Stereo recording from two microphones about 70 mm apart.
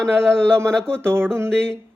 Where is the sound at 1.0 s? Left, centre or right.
Right.